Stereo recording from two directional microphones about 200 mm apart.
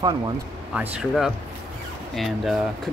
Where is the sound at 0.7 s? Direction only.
5° right (ahead or behind).